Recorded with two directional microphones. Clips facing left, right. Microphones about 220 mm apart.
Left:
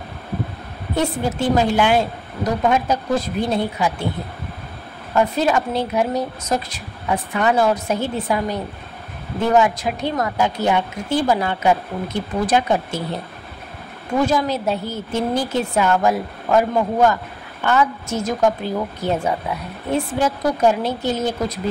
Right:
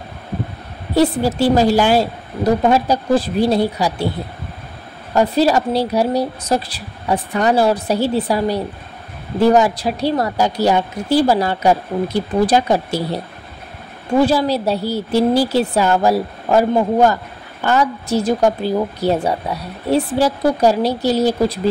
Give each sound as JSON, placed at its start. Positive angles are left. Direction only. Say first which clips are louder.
{"t": 0.9, "sound": "speech", "louder": "right 6 dB", "side_deg": -35}
{"t": 5.1, "sound": "speech", "louder": "right 4 dB", "side_deg": -35}